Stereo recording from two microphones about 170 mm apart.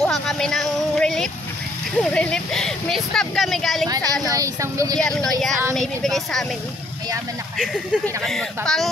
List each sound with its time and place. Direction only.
0.0 s a sound: 5° left (ahead or behind)
2.0 s speech: 5° left (ahead or behind)
3.8 s speech: 20° right (ahead or behind)
5.0 s speech: 5° left (ahead or behind)
7.5 s speech: centre (ahead or behind)